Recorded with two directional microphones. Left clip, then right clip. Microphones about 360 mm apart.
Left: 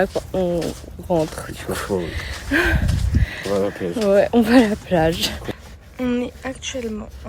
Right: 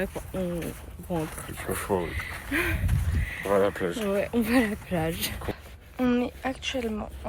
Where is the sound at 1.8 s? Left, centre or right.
Centre.